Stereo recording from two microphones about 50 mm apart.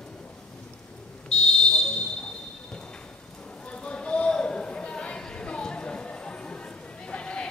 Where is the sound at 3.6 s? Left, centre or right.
Left.